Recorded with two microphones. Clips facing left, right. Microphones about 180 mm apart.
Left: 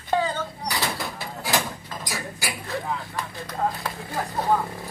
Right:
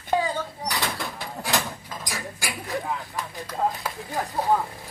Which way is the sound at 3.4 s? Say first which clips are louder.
Right 1 dB; 15° right (ahead or behind).